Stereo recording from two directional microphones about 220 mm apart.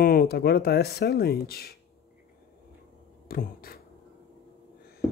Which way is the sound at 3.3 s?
40° left (ahead or behind).